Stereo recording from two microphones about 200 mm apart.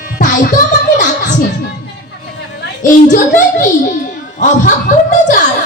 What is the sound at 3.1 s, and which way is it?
Speech, 40° left (ahead or behind).